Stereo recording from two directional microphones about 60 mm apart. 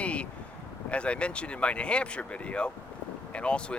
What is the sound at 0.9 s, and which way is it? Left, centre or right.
Speech, centre.